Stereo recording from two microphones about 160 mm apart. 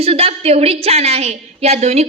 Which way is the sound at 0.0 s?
40° right (ahead or behind).